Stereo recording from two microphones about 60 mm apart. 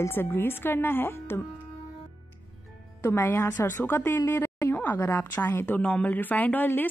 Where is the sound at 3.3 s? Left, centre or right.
Left.